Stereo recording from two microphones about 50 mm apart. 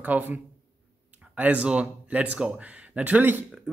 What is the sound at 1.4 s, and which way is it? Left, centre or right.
A man's voice, right.